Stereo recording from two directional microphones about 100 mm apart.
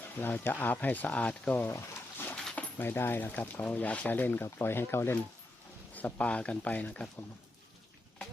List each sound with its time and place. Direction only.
0.2 s speech: 20° left (ahead or behind)
1.7 s a sound: 20° left (ahead or behind)
2.3 s speech: 10° left (ahead or behind)